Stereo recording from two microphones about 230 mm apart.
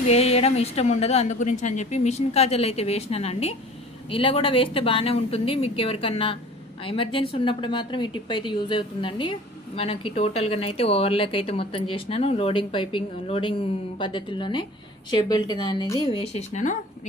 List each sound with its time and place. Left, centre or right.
0.1 s speech: left